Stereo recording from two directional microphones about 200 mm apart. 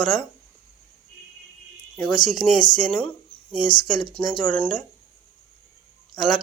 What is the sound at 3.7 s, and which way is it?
Speech, 20° left (ahead or behind).